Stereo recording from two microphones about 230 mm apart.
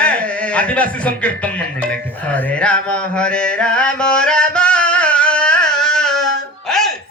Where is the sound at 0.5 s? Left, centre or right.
Centre.